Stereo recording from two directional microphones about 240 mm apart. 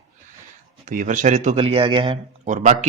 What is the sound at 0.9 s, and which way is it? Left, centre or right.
Speech, right.